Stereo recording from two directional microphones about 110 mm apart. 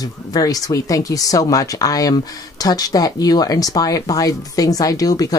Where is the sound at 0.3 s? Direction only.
35° left (ahead or behind).